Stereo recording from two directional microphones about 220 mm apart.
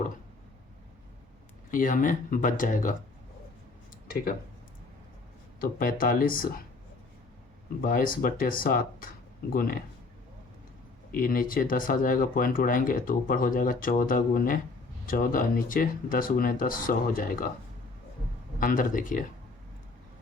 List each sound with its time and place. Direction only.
1.7 s speech: 35° left (ahead or behind)
5.5 s speech: 40° left (ahead or behind)
7.8 s speech: 40° left (ahead or behind)
11.1 s speech: 40° left (ahead or behind)
18.6 s speech: 40° left (ahead or behind)